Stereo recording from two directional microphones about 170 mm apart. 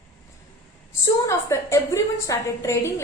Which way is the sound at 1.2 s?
15° left (ahead or behind).